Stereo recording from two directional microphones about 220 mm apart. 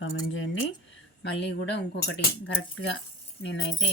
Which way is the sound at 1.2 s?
50° left (ahead or behind).